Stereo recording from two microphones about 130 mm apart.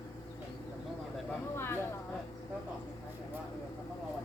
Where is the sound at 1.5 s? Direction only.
20° left (ahead or behind).